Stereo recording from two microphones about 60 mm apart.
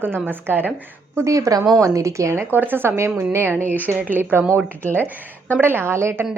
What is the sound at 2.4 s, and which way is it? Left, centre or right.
Speech, right.